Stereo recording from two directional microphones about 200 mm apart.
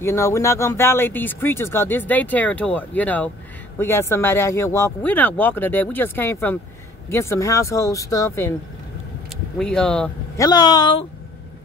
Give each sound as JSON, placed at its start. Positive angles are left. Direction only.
{"t": 0.0, "sound": "speech", "side_deg": 15}
{"t": 9.6, "sound": "speech", "side_deg": 5}
{"t": 10.3, "sound": "speech", "side_deg": 20}